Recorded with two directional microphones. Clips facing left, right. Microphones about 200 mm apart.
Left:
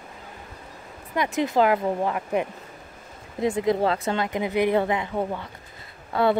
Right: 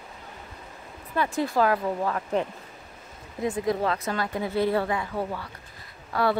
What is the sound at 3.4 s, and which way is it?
A woman's voice, 25° left (ahead or behind).